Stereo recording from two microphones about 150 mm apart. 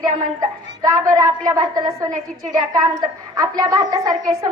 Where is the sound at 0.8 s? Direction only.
20° right (ahead or behind).